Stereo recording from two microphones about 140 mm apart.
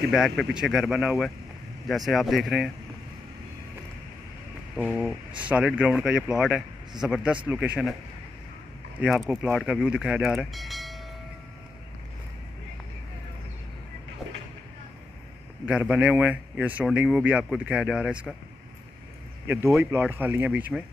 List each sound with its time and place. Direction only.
0.1 s speech: 5° right (ahead or behind)
4.8 s speech: 5° left (ahead or behind)
5.5 s speech: 10° right (ahead or behind)
9.0 s speech: centre (ahead or behind)
15.6 s speech: 10° right (ahead or behind)
19.4 s speech: 15° right (ahead or behind)